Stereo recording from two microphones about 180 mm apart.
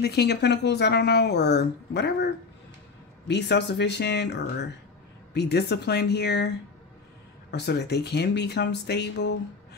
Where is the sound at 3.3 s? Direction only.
70° left (ahead or behind).